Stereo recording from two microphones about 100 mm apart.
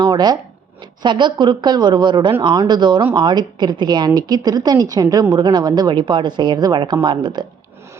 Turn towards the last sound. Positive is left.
turn(degrees=-50)  # may be behind; listen again after turning